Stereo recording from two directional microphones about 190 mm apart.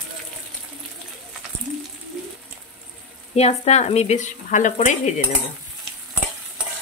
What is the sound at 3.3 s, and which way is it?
Speech, 35° left (ahead or behind).